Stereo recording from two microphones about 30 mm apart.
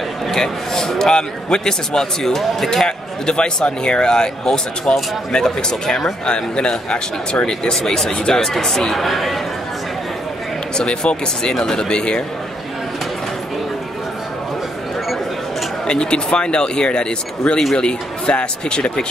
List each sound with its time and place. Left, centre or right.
0.3 s a man's voice: centre
3.3 s speech: left
5.9 s a man's voice: centre
6.2 s speech: left
7.7 s a man's voice: centre
8.9 s speech: centre
10.8 s speech: left
15.9 s speech: left